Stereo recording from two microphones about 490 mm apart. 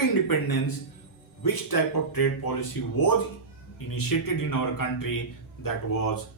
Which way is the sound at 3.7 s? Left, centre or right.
Left.